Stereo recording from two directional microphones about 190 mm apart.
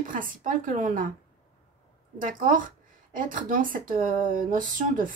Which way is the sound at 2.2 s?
45° right (ahead or behind).